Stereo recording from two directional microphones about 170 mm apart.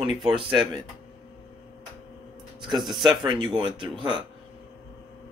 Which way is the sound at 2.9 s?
25° right (ahead or behind).